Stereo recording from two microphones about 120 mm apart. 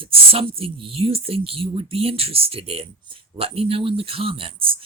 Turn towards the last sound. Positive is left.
turn(degrees=-50)  # may be behind; listen again after turning